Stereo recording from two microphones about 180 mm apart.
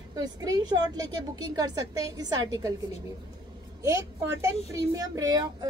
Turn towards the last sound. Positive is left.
turn(degrees=-20)  # may be behind; listen again after turning